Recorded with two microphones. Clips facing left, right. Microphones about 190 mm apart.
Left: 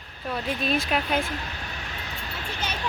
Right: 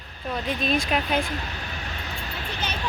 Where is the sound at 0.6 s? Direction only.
5° left (ahead or behind).